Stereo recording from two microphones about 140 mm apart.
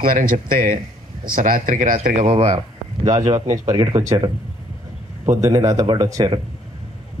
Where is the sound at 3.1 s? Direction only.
25° right (ahead or behind).